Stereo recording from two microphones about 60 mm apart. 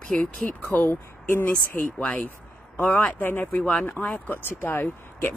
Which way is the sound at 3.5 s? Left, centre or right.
Centre.